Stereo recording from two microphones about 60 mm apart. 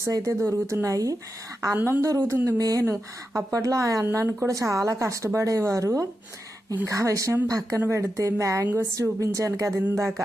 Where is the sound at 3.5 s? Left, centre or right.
Right.